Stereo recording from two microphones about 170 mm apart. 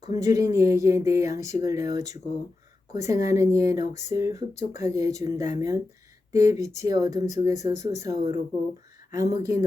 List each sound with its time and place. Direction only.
0.1 s speech: 20° right (ahead or behind)